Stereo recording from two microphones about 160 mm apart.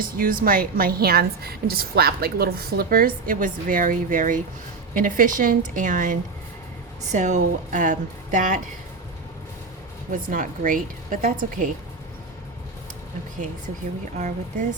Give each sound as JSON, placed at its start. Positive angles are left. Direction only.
{"t": 0.0, "sound": "a woman's voice", "side_deg": -65}
{"t": 10.1, "sound": "a woman's voice", "side_deg": -55}
{"t": 14.2, "sound": "speech", "side_deg": -50}